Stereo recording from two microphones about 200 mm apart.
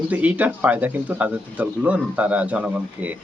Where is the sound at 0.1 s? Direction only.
10° right (ahead or behind).